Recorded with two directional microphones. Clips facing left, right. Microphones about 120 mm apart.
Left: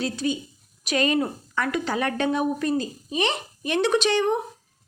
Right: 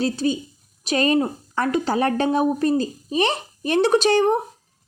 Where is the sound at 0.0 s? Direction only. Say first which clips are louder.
Right 4 dB; 35° right (ahead or behind).